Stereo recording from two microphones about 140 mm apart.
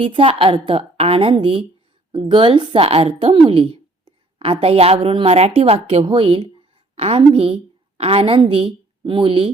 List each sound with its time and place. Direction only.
0.0 s a woman's voice: 40° right (ahead or behind)